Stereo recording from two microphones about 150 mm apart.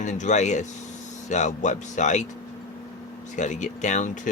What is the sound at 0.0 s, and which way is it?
Speech, 55° left (ahead or behind).